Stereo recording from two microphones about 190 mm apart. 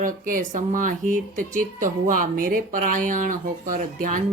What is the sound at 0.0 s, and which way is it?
Speech, 45° right (ahead or behind).